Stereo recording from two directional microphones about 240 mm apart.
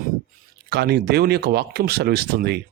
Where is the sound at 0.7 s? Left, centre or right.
Right.